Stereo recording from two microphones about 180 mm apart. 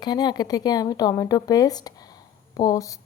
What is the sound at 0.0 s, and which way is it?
A woman's voice, 25° left (ahead or behind).